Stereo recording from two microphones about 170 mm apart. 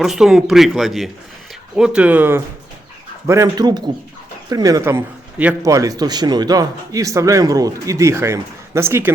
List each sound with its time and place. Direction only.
0.0 s a man's voice: centre (ahead or behind)